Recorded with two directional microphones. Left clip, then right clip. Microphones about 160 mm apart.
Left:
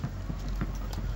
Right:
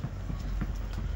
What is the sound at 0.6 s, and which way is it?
Music, 90° left.